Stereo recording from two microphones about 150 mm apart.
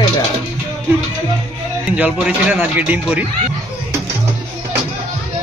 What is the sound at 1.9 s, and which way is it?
Speech, 5° right (ahead or behind).